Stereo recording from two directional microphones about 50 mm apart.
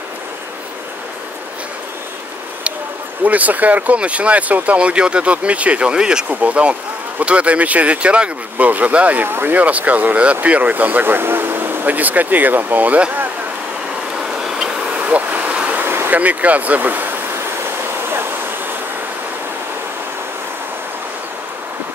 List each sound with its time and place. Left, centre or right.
3.3 s speech: right
9.3 s speech: right
9.6 s speech: right
14.1 s vehicle: centre
15.0 s a sound: right
15.7 s a sound: right
16.1 s speech: right